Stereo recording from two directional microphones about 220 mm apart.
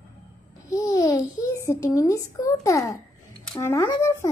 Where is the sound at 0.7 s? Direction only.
15° left (ahead or behind).